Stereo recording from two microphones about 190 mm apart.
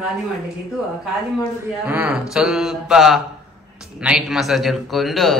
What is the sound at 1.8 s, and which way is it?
A man's voice, 10° right (ahead or behind).